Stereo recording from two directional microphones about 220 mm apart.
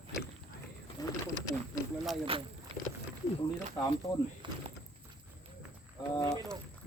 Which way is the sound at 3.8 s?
15° left (ahead or behind).